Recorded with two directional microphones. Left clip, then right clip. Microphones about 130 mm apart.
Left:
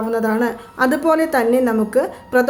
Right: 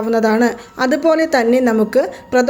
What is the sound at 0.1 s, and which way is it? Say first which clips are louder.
A woman's voice: right 6 dB; 30° right (ahead or behind).